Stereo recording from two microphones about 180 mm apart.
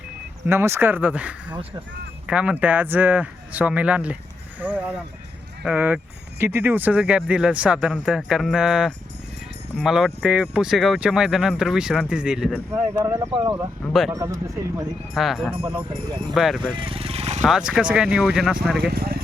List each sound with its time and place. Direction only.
0.4 s speech: 15° right (ahead or behind)
12.7 s speech: 15° right (ahead or behind)
15.1 s speech: centre (ahead or behind)
15.8 s speech: 30° right (ahead or behind)
16.3 s speech: centre (ahead or behind)
16.6 s vehicle: 30° right (ahead or behind)
17.4 s speech: 5° right (ahead or behind)
18.8 s speech: 60° right (ahead or behind)